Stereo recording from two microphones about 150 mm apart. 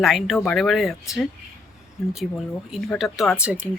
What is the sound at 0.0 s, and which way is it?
Speech, centre (ahead or behind).